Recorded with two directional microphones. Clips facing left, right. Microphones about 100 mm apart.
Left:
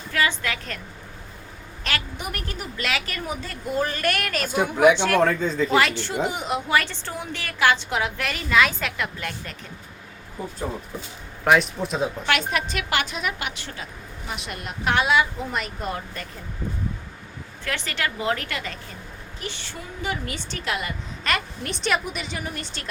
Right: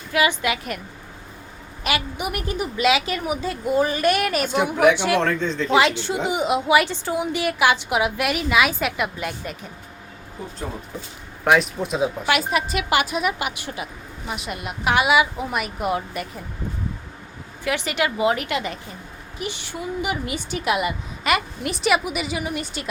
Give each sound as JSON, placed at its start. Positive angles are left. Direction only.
{"t": 0.1, "sound": "a woman's voice", "side_deg": -15}
{"t": 1.8, "sound": "a woman's voice", "side_deg": -15}
{"t": 5.2, "sound": "speech", "side_deg": 5}
{"t": 5.7, "sound": "a woman's voice", "side_deg": -20}
{"t": 11.4, "sound": "a woman's voice", "side_deg": 0}
{"t": 17.7, "sound": "a woman's voice", "side_deg": -15}